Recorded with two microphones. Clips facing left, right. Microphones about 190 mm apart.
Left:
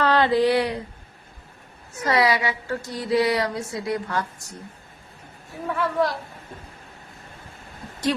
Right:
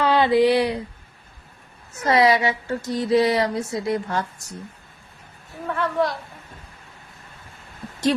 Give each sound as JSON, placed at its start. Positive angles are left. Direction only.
{"t": 0.0, "sound": "a sound", "side_deg": -15}
{"t": 2.0, "sound": "speech", "side_deg": -25}
{"t": 5.7, "sound": "speech", "side_deg": 0}